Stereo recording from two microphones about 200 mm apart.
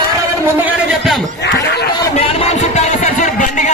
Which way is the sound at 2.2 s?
30° left (ahead or behind).